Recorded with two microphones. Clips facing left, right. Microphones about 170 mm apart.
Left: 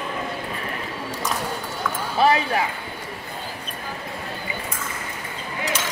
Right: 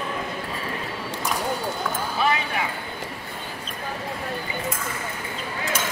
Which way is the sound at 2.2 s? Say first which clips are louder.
Left 6 dB; 35° left (ahead or behind).